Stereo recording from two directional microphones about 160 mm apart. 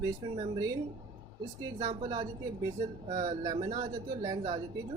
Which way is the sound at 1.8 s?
30° right (ahead or behind).